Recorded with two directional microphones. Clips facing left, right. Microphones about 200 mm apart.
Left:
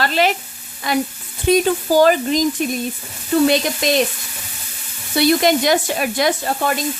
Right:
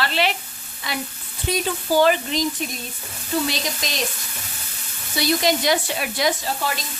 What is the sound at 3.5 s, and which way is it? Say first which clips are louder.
Frying: left 11 dB; 60° left (ahead or behind).